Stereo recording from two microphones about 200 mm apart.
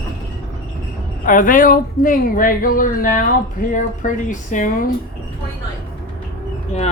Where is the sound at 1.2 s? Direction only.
40° left (ahead or behind).